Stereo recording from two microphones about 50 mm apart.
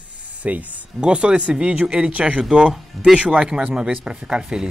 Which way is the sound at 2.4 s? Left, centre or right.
Centre.